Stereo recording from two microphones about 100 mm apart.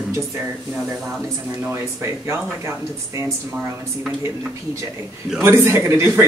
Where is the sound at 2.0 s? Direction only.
25° right (ahead or behind).